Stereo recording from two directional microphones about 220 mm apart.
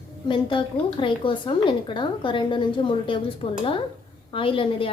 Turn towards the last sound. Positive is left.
turn(degrees=25)  # may be behind; listen again after turning